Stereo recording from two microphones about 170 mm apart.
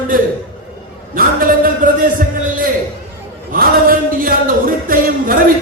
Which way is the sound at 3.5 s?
55° right (ahead or behind).